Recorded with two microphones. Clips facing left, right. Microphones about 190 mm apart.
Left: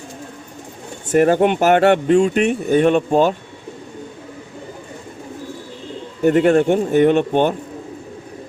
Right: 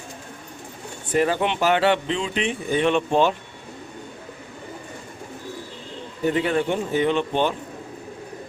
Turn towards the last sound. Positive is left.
turn(degrees=50)  # may be behind; listen again after turning